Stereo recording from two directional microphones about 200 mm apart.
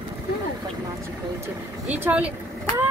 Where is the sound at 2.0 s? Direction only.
5° right (ahead or behind).